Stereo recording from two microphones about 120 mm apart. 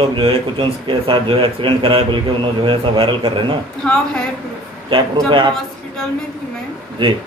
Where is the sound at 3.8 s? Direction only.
10° left (ahead or behind).